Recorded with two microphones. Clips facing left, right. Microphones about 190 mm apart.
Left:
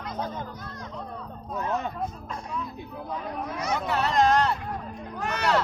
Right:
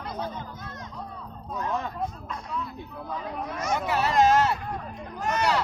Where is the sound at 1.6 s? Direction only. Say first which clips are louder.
Left 1 dB; 20° left (ahead or behind).